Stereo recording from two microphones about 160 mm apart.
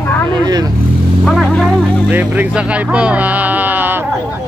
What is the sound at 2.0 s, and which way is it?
Speech, 10° right (ahead or behind).